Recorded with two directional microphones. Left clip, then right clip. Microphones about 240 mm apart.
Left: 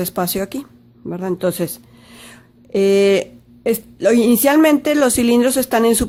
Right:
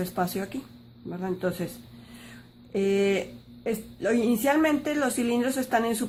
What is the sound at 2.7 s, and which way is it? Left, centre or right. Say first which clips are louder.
A woman's voice: left 11 dB; left.